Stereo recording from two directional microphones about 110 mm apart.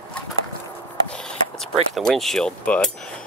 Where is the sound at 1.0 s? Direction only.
5° left (ahead or behind).